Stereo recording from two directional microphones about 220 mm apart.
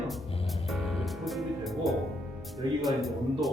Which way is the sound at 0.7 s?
Centre (ahead or behind).